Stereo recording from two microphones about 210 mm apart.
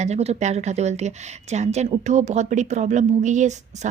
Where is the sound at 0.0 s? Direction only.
30° right (ahead or behind).